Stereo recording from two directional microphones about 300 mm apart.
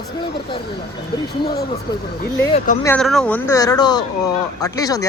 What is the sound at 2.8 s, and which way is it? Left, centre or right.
Speech, centre.